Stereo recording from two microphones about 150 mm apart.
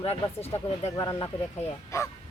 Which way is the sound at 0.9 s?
20° left (ahead or behind).